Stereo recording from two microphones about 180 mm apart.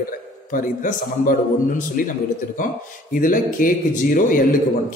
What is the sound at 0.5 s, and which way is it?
Speech, 50° left (ahead or behind).